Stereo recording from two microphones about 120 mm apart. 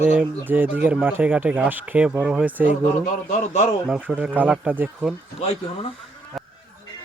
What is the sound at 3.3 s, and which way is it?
Speech, 80° left.